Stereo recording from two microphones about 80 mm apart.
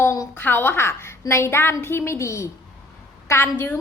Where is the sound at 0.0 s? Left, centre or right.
Left.